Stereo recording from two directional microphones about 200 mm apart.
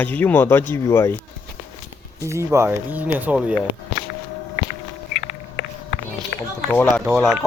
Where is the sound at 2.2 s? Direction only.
15° right (ahead or behind).